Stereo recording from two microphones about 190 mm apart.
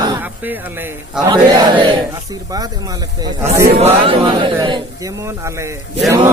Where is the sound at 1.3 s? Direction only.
25° right (ahead or behind).